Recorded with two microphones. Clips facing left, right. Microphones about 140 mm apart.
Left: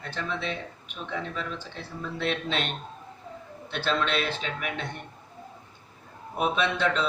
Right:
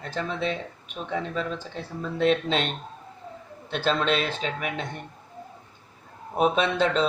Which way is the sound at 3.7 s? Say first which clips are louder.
Right 3 dB; 40° right (ahead or behind).